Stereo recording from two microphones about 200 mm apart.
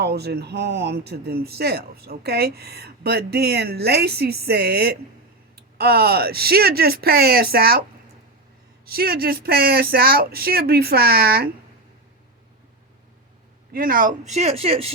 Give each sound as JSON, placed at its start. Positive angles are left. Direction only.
{"t": 0.0, "sound": "speech", "side_deg": -55}
{"t": 8.9, "sound": "speech", "side_deg": -50}
{"t": 13.7, "sound": "speech", "side_deg": -45}